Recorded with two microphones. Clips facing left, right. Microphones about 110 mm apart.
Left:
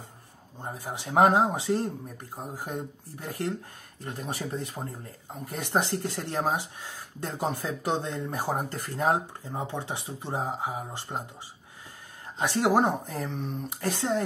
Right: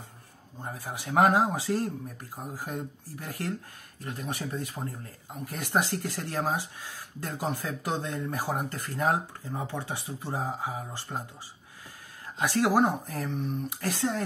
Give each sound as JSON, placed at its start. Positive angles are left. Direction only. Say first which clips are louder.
{"t": 0.6, "sound": "speech", "louder": "left 1 dB", "side_deg": 25}
{"t": 12.4, "sound": "speech", "louder": "even", "side_deg": 25}